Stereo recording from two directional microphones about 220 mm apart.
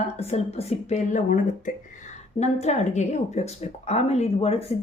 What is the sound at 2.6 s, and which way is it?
Speech, 30° left (ahead or behind).